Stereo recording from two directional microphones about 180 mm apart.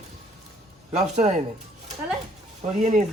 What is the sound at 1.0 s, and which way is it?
Speech, 40° right (ahead or behind).